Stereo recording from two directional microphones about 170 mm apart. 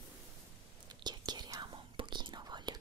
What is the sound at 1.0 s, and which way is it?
Whispering, 25° right (ahead or behind).